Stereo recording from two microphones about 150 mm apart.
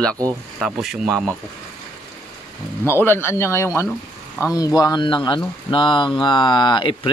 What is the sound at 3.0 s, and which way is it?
Speech, 15° left (ahead or behind).